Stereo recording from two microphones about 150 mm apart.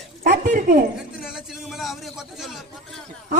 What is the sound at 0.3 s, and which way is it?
Dog, 60° right (ahead or behind).